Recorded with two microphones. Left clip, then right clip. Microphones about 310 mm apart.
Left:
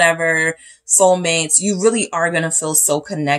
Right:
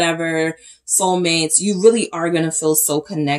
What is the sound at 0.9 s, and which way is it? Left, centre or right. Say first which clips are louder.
Speech: left 3 dB; left.